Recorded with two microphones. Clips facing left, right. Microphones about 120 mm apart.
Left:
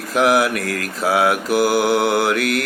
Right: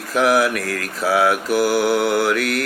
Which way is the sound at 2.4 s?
35° right (ahead or behind).